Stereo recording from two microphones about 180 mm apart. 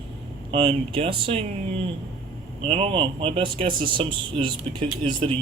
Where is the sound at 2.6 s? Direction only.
30° right (ahead or behind).